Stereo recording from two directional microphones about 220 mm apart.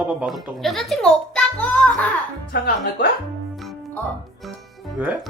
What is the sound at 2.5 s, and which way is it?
Speech, 45° left (ahead or behind).